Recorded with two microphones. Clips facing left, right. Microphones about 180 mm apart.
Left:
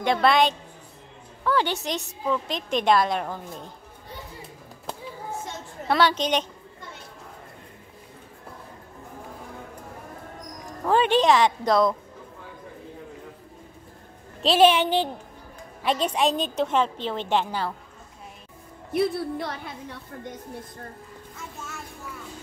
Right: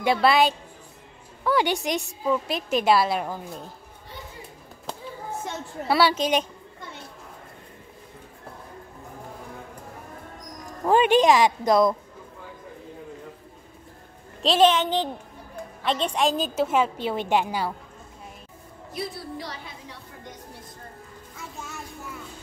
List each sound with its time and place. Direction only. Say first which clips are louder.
0.0 s a woman's voice: even; 5° right (ahead or behind)
5.9 s a woman's voice: right 1 dB; 10° right (ahead or behind)
10.9 s a woman's voice: right 2 dB; 15° right (ahead or behind)
14.4 s a woman's voice: left 1 dB; 5° left (ahead or behind); by 17.7 s 10° right (ahead or behind)
18.9 s a woman's voice: left 9 dB; 60° left (ahead or behind)